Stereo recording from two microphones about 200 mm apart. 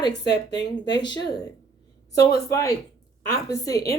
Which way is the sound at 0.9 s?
20° left (ahead or behind).